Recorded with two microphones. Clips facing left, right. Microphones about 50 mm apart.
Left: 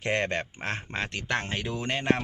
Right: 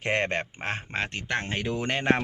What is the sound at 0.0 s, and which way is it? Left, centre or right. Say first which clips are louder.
Speech: right 1 dB; right.